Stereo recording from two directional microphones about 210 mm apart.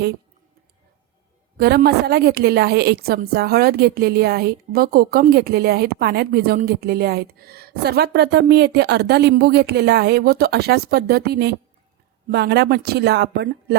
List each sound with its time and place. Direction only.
1.5 s a woman's voice: 50° right (ahead or behind)